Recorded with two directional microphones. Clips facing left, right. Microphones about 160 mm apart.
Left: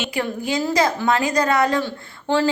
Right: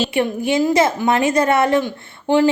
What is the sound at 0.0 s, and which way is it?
Speech, 25° right (ahead or behind).